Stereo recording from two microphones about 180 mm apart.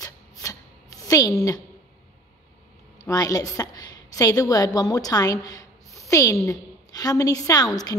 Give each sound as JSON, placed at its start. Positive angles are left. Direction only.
{"t": 0.0, "sound": "writing", "side_deg": 20}
{"t": 3.1, "sound": "a woman's voice", "side_deg": 20}
{"t": 6.0, "sound": "a sound", "side_deg": 20}
{"t": 6.4, "sound": "a woman's voice", "side_deg": 20}